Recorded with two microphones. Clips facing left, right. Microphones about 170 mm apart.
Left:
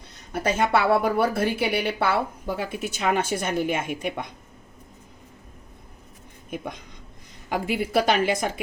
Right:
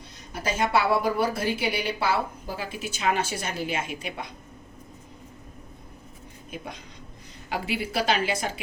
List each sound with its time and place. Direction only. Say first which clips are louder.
0.3 s speech: left 3 dB; 60° left (ahead or behind)
6.5 s a woman's voice: left 5 dB; 50° left (ahead or behind)